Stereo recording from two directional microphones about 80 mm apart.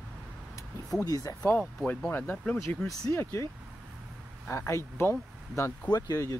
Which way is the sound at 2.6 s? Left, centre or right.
Left.